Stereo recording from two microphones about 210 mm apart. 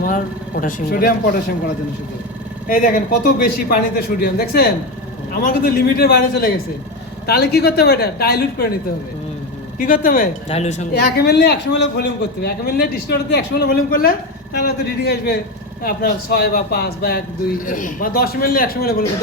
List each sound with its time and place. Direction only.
0.0 s a man's voice: 40° left (ahead or behind)
9.7 s speech: 40° left (ahead or behind)
10.9 s a man's voice: 50° left (ahead or behind)